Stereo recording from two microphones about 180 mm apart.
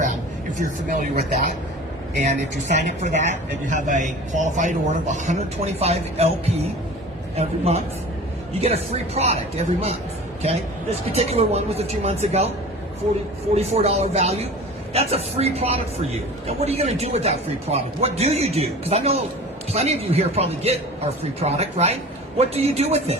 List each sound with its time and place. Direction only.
0.9 s a woman's voice: 45° right (ahead or behind)
11.1 s a woman's voice: 35° right (ahead or behind)
13.6 s a woman's voice: 35° right (ahead or behind)